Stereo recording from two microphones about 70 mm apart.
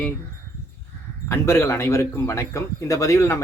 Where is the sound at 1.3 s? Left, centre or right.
Left.